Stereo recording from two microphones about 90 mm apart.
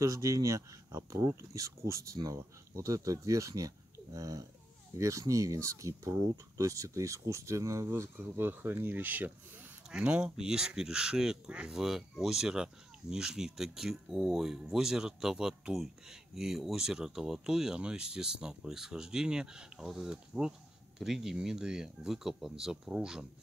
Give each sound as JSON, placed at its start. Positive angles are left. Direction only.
{"t": 0.0, "sound": "speech", "side_deg": -35}